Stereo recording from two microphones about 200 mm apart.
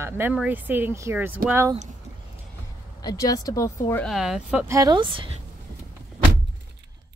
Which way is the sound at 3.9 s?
5° left (ahead or behind).